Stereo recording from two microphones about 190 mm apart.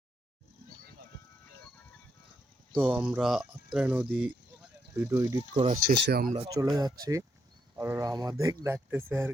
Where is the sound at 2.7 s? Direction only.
5° right (ahead or behind).